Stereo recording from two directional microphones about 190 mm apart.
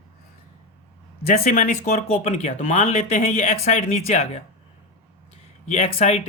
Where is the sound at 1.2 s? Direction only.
50° left (ahead or behind).